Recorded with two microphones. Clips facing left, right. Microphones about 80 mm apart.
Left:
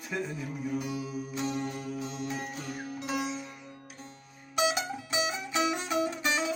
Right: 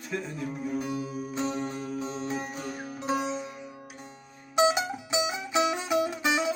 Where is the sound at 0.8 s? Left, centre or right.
Right.